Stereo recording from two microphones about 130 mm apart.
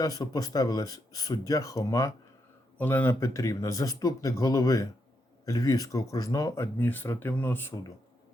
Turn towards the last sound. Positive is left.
turn(degrees=15)  # may be behind; listen again after turning